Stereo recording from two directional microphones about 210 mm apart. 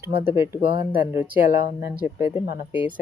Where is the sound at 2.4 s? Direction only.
45° left (ahead or behind).